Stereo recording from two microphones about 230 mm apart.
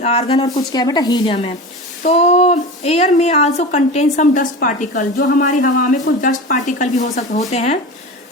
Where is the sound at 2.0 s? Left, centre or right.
Left.